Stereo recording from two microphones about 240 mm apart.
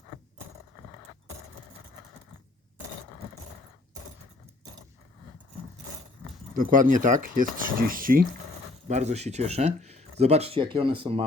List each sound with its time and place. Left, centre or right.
6.5 s speech: right